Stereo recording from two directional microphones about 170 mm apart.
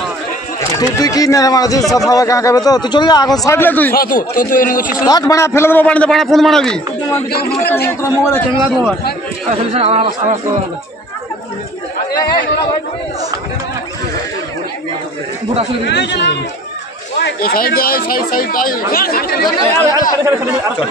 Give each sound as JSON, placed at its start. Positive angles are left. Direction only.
{"t": 0.6, "sound": "speech", "side_deg": 20}
{"t": 3.9, "sound": "speech", "side_deg": 60}
{"t": 5.0, "sound": "a man's voice", "side_deg": 20}
{"t": 7.2, "sound": "a man's voice", "side_deg": 65}
{"t": 8.0, "sound": "a man's voice", "side_deg": 15}
{"t": 8.6, "sound": "a man's voice", "side_deg": 0}
{"t": 9.6, "sound": "speech", "side_deg": -35}
{"t": 15.9, "sound": "speech", "side_deg": 90}
{"t": 17.2, "sound": "speech", "side_deg": 60}
{"t": 19.9, "sound": "speech", "side_deg": 20}